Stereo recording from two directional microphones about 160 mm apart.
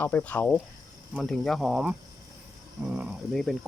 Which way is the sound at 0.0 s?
10° left (ahead or behind).